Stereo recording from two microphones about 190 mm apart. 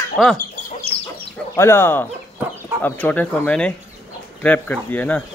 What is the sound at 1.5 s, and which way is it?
Speech, 15° left (ahead or behind).